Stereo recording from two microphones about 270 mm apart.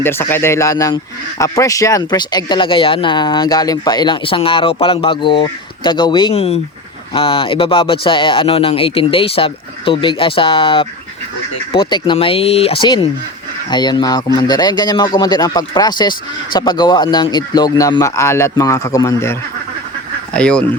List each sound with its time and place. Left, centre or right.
0.0 s speech: centre